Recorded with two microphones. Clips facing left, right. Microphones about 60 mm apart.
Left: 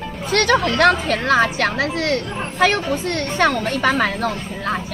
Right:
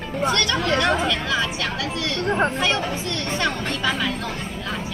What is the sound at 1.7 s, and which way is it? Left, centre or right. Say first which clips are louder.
Speech: left 6 dB; left.